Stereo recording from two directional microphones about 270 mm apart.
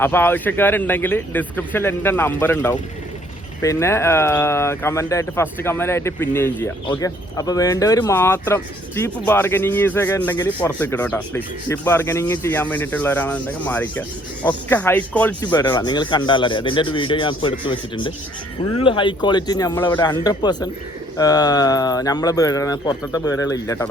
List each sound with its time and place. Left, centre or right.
0.0 s speech: centre